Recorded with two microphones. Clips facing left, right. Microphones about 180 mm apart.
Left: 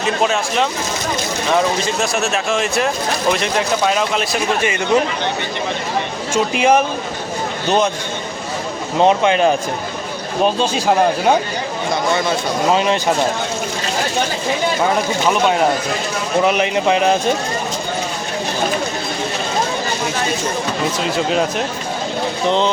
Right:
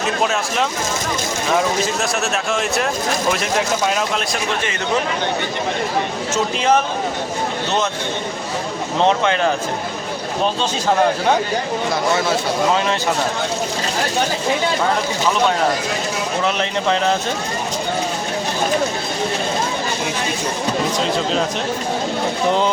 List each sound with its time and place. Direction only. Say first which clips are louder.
0.3 s a man's voice: left 2 dB; centre (ahead or behind)
6.3 s speech: left 3 dB; 10° left (ahead or behind)
9.0 s speech: left 3 dB; 15° left (ahead or behind)
12.7 s speech: left 3 dB; 20° left (ahead or behind)
16.4 s speech: left 6 dB; 15° left (ahead or behind)
21.0 s speech: left 4 dB; 10° left (ahead or behind)
22.4 s speech: left 1 dB; 10° right (ahead or behind)